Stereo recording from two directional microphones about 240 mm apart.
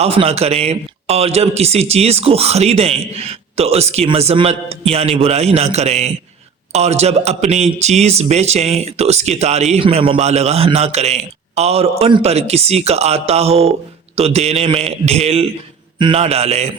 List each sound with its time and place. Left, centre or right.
0.0 s speech: right